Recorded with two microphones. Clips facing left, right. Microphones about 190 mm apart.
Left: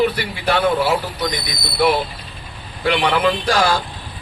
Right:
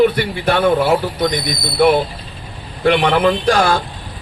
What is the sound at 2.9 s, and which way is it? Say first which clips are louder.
Speech: right 4 dB; 50° right (ahead or behind).